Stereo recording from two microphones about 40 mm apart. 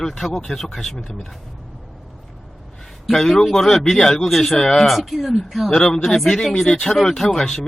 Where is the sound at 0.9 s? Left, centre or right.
Centre.